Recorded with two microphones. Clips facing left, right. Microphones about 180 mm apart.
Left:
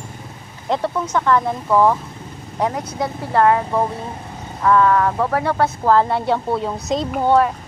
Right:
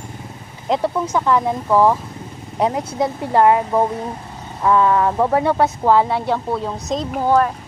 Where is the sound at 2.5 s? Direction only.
20° right (ahead or behind); by 7.5 s centre (ahead or behind).